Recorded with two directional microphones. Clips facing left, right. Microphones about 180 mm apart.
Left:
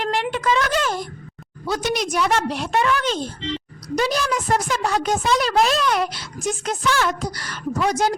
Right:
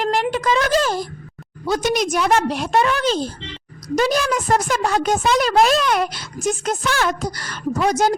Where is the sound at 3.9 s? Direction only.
50° right (ahead or behind).